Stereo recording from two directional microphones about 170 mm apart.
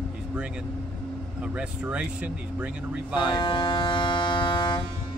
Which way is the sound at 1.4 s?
5° right (ahead or behind).